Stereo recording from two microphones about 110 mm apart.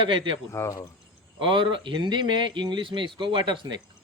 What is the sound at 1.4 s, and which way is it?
Speech, 50° right (ahead or behind).